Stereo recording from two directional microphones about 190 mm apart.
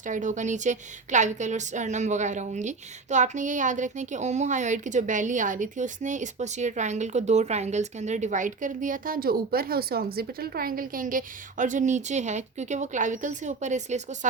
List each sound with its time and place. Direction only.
0.0 s a woman's voice: 40° right (ahead or behind)